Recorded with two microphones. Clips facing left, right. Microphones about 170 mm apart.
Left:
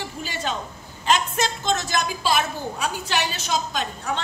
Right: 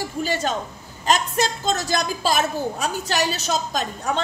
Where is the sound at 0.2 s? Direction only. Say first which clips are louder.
Right 6 dB; 40° right (ahead or behind).